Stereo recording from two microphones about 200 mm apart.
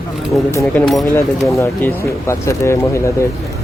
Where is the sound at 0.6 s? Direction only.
Centre (ahead or behind).